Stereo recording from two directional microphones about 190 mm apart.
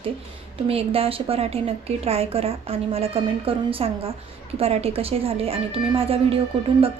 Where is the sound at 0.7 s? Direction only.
30° right (ahead or behind).